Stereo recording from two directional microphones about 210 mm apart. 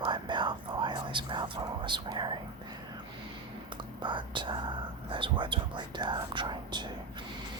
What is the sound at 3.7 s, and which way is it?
Speech, 20° right (ahead or behind).